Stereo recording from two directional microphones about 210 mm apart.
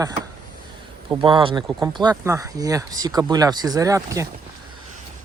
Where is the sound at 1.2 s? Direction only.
25° right (ahead or behind).